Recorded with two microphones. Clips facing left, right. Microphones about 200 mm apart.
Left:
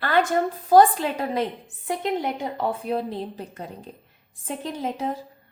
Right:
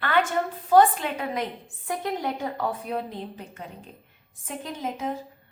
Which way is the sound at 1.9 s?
20° left (ahead or behind).